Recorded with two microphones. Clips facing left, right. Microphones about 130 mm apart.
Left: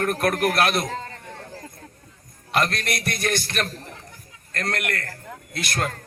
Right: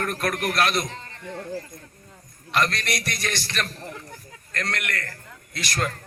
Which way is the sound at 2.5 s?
55° left (ahead or behind).